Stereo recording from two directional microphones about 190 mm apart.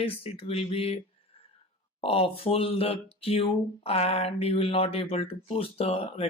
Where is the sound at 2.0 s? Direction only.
30° left (ahead or behind).